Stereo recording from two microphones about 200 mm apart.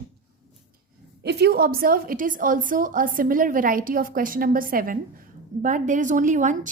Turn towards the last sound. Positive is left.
turn(degrees=-40)  # may be behind; listen again after turning